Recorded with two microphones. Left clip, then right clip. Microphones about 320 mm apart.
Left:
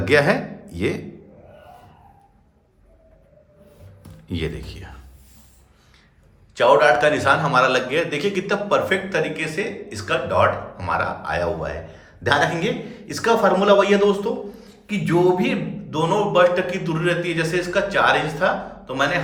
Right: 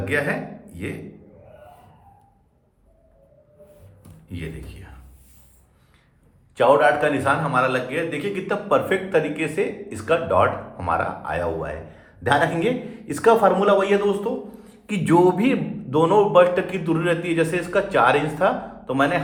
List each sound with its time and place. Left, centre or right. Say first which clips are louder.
0.0 s speech: left 6 dB; centre
4.3 s speech: left 8 dB; centre
6.6 s a man's voice: left 2 dB; centre
14.8 s a man's voice: right 1 dB; centre